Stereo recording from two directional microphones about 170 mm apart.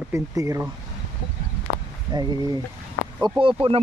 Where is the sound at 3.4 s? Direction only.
30° right (ahead or behind).